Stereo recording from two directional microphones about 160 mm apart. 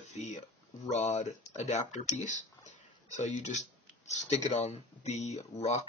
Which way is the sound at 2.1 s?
50° left (ahead or behind).